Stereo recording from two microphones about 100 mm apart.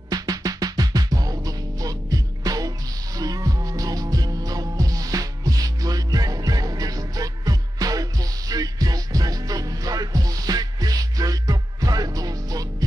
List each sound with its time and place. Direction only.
0.1 s music: 40° right (ahead or behind)